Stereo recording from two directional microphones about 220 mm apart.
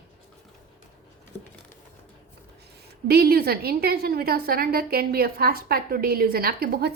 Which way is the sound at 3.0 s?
45° right (ahead or behind).